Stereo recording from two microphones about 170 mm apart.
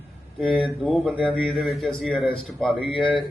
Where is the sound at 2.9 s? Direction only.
30° left (ahead or behind).